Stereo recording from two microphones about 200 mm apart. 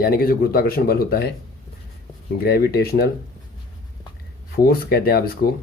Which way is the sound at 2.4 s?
50° left (ahead or behind).